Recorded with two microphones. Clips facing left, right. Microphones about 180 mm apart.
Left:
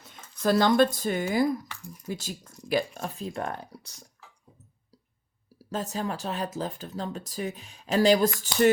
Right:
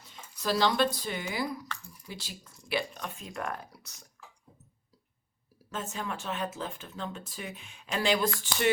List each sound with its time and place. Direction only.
0.4 s speech: 50° left (ahead or behind)
1.6 s a sound: 15° left (ahead or behind)
2.0 s speech: 45° left (ahead or behind); by 4.1 s 30° left (ahead or behind)
5.7 s speech: 35° left (ahead or behind)